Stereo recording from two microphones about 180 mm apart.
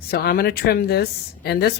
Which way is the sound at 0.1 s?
60° left (ahead or behind).